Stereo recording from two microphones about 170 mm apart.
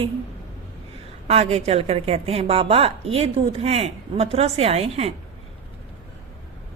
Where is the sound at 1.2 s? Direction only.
35° right (ahead or behind).